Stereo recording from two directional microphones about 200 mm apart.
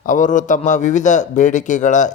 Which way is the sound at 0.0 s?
40° left (ahead or behind).